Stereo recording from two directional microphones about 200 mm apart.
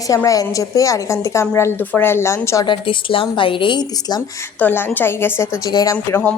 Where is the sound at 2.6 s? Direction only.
25° left (ahead or behind).